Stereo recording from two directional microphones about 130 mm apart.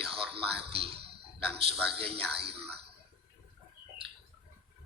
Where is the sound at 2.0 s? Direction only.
45° right (ahead or behind).